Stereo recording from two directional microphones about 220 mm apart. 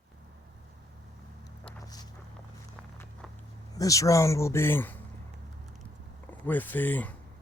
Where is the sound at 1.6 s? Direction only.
15° left (ahead or behind).